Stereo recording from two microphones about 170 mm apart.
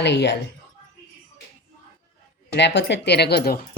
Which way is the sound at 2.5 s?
85° left.